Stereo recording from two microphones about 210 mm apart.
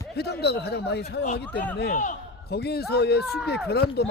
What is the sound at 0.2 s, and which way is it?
A man's voice, 50° left (ahead or behind).